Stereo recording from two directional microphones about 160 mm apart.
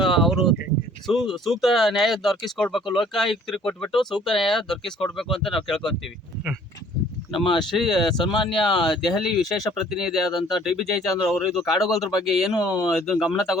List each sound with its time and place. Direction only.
0.0 s a sound: centre (ahead or behind)
1.0 s speech: centre (ahead or behind)
7.3 s speech: 30° left (ahead or behind)
7.7 s speech: centre (ahead or behind)
8.2 s speech: 30° left (ahead or behind)
8.8 s speech: centre (ahead or behind)